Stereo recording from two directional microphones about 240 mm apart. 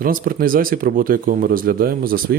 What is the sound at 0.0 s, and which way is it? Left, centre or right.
Speech, right.